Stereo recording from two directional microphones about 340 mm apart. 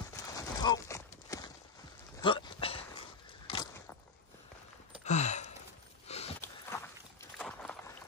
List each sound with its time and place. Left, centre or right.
0.1 s clip-clop: centre
2.2 s a sound: centre
5.0 s sigh: centre
6.0 s rowboat: centre